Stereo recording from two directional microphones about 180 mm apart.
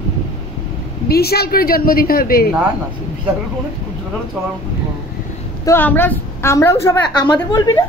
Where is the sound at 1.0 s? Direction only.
60° left (ahead or behind).